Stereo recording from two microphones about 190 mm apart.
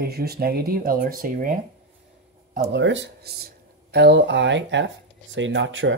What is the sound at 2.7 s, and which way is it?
Speech, 75° right (ahead or behind).